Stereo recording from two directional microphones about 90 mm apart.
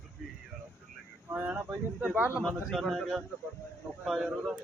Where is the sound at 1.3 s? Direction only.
20° right (ahead or behind).